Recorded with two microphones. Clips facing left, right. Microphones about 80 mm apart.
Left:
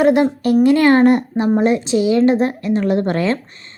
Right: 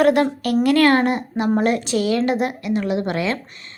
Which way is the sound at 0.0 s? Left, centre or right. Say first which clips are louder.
Left 3 dB; left.